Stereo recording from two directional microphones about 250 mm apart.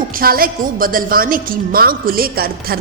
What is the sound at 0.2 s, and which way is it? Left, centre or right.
A woman's voice, right.